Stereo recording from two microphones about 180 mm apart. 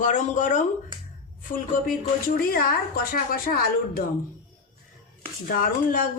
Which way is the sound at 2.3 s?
55° left (ahead or behind).